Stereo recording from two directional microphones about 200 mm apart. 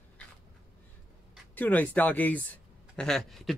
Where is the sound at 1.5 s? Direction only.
10° left (ahead or behind).